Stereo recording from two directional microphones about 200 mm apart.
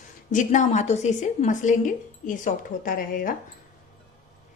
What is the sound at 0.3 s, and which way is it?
A woman's voice, 40° left (ahead or behind).